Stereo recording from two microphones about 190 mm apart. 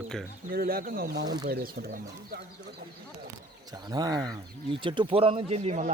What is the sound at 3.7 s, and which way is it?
Speech, 20° right (ahead or behind).